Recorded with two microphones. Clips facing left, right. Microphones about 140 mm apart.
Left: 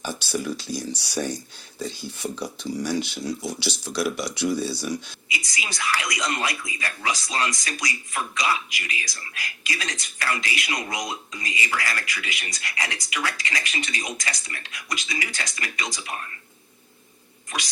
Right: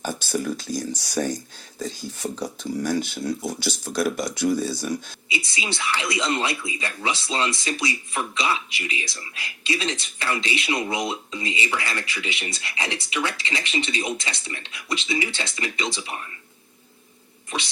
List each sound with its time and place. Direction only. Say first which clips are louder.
0.0 s speech: right 2 dB; 45° right (ahead or behind)
5.3 s speech: right 4 dB; 25° right (ahead or behind)